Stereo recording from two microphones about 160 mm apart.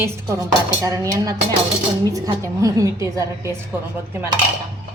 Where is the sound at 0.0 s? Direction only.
20° right (ahead or behind).